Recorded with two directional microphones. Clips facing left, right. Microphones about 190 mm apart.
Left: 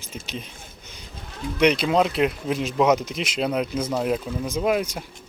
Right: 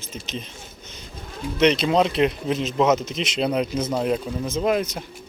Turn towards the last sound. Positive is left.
turn(degrees=10)  # may be behind; listen again after turning